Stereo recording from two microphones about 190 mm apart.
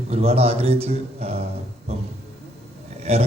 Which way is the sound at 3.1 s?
35° right (ahead or behind).